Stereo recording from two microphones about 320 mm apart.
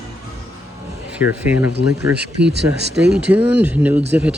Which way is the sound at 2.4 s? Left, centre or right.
Right.